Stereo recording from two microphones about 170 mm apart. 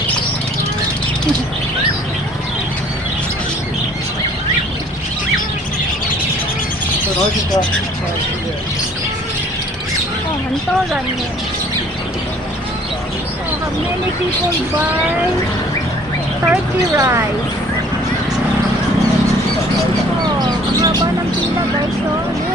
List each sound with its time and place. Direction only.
16.5 s speech: 15° right (ahead or behind)
20.4 s vehicle: 25° right (ahead or behind)